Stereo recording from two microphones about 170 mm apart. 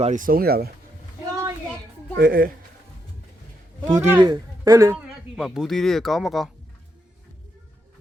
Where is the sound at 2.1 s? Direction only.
60° right (ahead or behind).